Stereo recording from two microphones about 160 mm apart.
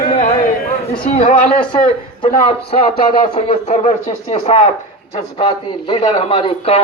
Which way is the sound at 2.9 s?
70° left (ahead or behind).